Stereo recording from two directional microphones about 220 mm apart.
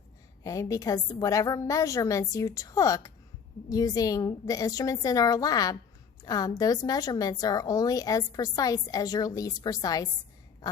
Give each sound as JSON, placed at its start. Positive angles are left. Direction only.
{"t": 0.4, "sound": "a woman's voice", "side_deg": 15}